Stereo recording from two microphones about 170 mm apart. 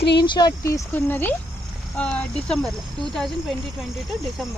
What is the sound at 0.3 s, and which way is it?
Speech, 25° left (ahead or behind).